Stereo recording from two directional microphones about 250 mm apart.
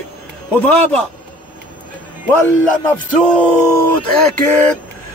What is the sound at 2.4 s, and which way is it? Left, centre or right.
Speech, centre.